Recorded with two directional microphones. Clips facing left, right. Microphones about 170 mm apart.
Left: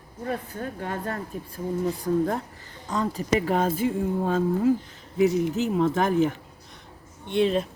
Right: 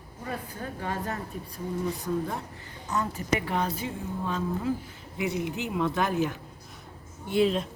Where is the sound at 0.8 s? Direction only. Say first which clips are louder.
Even; 55° left (ahead or behind).